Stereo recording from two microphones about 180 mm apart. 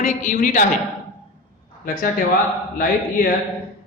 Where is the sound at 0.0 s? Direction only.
40° left (ahead or behind).